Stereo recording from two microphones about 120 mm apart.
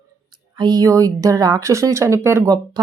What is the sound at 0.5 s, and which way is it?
Speech, 35° right (ahead or behind).